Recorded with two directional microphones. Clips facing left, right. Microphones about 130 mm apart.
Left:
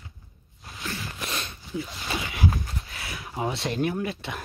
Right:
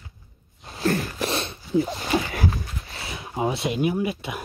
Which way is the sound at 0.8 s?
55° right (ahead or behind).